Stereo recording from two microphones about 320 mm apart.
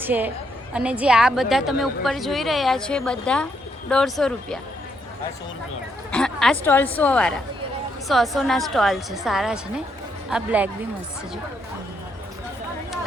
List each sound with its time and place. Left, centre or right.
0.0 s a woman's voice: centre
6.1 s a woman's voice: centre